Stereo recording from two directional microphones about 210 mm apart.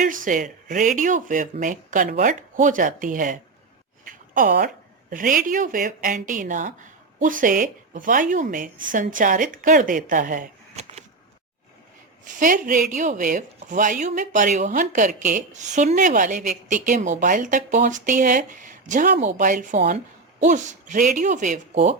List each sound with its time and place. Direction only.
0.0 s speech: 40° right (ahead or behind)
4.0 s a sound: 40° right (ahead or behind)
5.1 s speech: 40° right (ahead or behind)
12.3 s speech: 40° right (ahead or behind)